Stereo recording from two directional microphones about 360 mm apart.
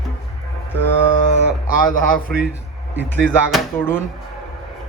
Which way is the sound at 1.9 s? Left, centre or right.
Left.